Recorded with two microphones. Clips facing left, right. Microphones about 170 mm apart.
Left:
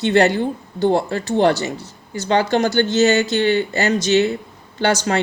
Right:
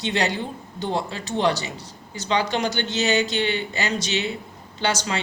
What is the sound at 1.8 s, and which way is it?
Speech, 15° right (ahead or behind).